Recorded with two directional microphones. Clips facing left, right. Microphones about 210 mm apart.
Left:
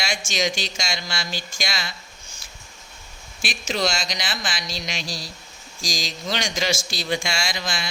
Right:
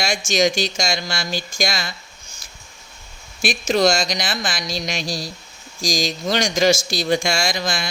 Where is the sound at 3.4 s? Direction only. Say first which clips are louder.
Right 8 dB; 45° right (ahead or behind).